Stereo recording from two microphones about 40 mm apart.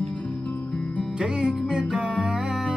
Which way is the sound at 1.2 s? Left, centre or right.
Centre.